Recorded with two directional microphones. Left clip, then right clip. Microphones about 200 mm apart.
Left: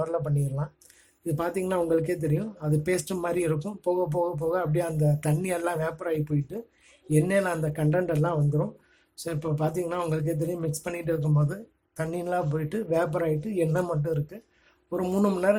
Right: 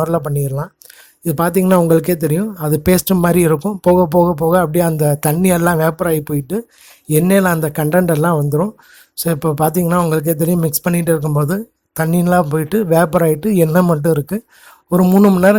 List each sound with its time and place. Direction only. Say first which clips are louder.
0.0 s speech: right 11 dB; 40° right (ahead or behind)